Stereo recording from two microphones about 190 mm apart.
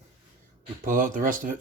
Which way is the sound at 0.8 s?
45° right (ahead or behind).